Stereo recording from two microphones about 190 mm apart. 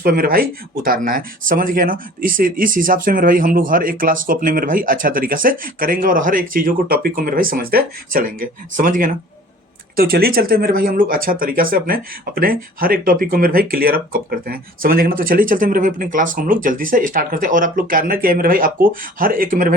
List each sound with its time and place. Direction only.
0.0 s speech: 50° right (ahead or behind)